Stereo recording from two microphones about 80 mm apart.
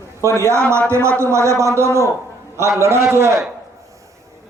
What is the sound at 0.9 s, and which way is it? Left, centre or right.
A man's voice, right.